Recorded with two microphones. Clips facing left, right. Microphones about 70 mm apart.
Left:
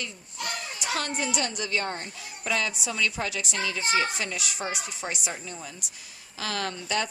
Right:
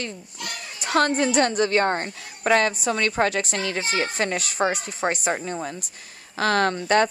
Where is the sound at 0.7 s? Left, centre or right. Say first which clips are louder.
Right 11 dB; right.